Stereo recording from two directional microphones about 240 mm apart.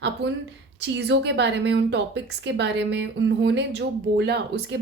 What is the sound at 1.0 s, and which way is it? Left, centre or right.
A woman's voice, right.